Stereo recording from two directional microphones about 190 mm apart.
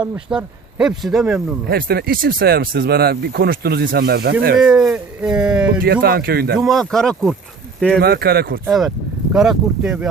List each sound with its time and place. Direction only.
0.0 s speech: 5° right (ahead or behind)
1.6 s speech: 55° right (ahead or behind)
4.6 s speech: 5° right (ahead or behind)
5.8 s speech: 50° right (ahead or behind)
6.6 s speech: centre (ahead or behind)
7.9 s speech: 55° right (ahead or behind)
8.6 s speech: centre (ahead or behind)